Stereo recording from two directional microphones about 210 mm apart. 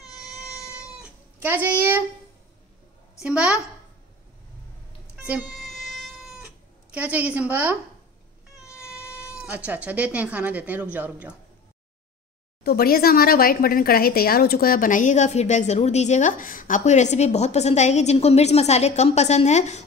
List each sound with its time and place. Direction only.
0.1 s cat: centre (ahead or behind)
3.2 s a woman's voice: 5° right (ahead or behind)
5.2 s cat: 5° right (ahead or behind)
8.6 s vehicle: 5° right (ahead or behind)
9.3 s speech: 5° right (ahead or behind)
12.6 s a woman's voice: 45° left (ahead or behind)